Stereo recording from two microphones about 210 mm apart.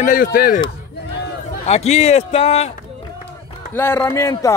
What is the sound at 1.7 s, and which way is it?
Speech, 30° left (ahead or behind).